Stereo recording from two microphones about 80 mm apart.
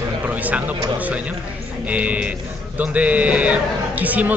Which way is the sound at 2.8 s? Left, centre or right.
Centre.